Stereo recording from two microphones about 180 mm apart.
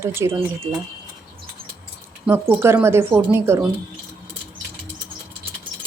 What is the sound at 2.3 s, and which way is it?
A woman's voice, 15° right (ahead or behind).